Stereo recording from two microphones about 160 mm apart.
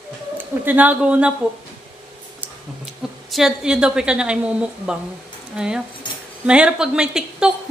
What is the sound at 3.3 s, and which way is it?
A woman's voice, 5° right (ahead or behind).